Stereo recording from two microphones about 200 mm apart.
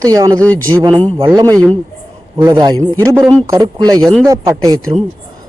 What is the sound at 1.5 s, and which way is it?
Speech, 5° left (ahead or behind).